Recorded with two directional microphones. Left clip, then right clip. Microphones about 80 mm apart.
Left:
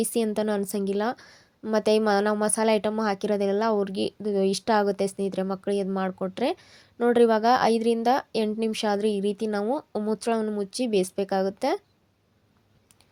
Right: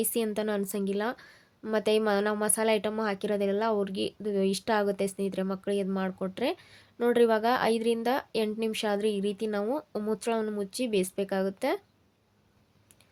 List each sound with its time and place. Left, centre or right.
0.0 s a woman's voice: left